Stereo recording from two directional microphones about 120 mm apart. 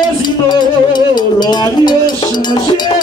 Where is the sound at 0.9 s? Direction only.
35° left (ahead or behind).